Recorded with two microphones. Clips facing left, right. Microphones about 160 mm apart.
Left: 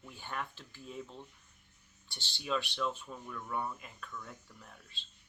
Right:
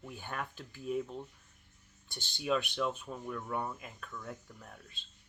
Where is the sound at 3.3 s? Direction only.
40° right (ahead or behind).